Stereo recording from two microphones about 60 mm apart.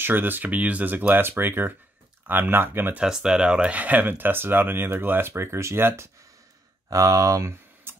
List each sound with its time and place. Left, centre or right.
0.0 s speech: right
3.0 s speech: centre; by 6.0 s right
6.9 s speech: right
7.9 s a sound: right